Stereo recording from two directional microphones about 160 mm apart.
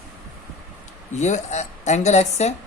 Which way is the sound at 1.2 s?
50° left (ahead or behind).